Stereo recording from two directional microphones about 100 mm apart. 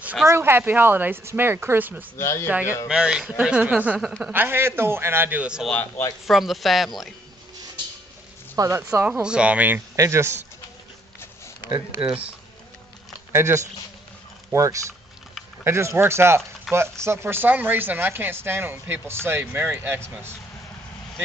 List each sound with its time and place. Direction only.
0.3 s speech: 25° right (ahead or behind)
2.1 s speech: 30° left (ahead or behind)
2.9 s a man's voice: 10° right (ahead or behind)
8.5 s speech: 30° right (ahead or behind)
9.0 s a man's voice: 10° right (ahead or behind)
9.9 s speech: 30° right (ahead or behind)
12.0 s a man's voice: 15° right (ahead or behind)
13.3 s speech: 25° right (ahead or behind)
16.7 s speech: centre (ahead or behind)
17.0 s speech: 25° right (ahead or behind)